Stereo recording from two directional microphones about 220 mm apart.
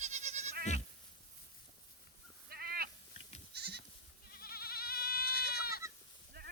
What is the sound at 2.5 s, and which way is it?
Sheep, 45° right (ahead or behind).